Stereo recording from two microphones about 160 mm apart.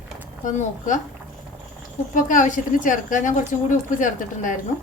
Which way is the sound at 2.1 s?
55° left (ahead or behind).